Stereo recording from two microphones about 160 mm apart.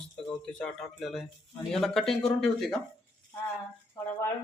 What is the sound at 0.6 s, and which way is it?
Speech, centre (ahead or behind).